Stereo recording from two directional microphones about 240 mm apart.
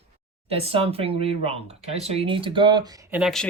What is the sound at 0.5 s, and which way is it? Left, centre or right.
Speech, right.